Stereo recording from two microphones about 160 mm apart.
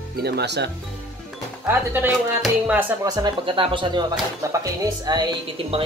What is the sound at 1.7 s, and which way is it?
Speech, 15° right (ahead or behind).